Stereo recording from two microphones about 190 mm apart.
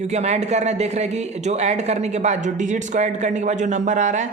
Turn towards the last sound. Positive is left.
turn(degrees=-40)  # may be behind; listen again after turning